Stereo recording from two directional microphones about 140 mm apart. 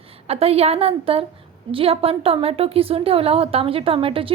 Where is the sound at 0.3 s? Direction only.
45° right (ahead or behind).